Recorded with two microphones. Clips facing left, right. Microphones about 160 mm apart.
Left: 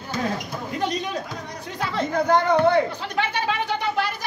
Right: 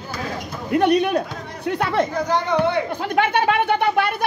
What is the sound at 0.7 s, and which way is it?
Speech, 60° right (ahead or behind).